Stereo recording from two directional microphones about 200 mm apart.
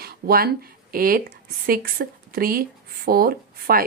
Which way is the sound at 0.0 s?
50° right (ahead or behind).